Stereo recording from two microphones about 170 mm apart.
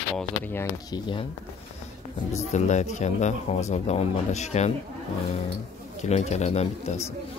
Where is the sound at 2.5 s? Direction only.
45° left (ahead or behind).